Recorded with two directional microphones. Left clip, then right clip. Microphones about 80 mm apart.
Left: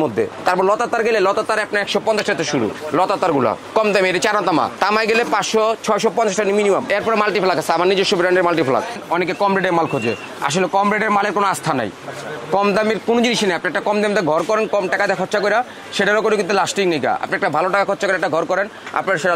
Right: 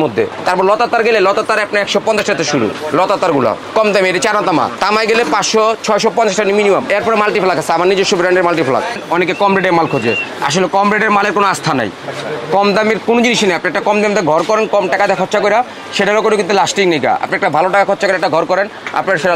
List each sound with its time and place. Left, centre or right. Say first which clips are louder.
0.0 s speech: right 4 dB; left